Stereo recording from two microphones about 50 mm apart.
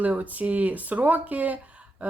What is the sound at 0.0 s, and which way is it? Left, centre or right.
Speech, right.